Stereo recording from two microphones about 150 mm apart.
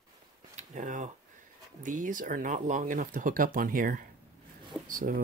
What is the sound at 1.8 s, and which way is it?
Speech, 60° right (ahead or behind).